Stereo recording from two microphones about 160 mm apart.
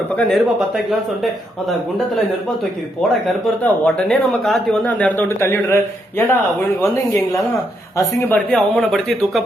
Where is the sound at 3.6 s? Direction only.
5° left (ahead or behind).